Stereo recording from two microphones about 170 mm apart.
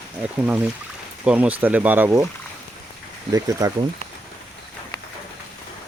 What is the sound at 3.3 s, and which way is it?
Speech, 20° right (ahead or behind).